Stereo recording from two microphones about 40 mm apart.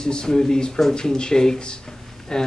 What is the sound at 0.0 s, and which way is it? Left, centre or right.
Speech, centre.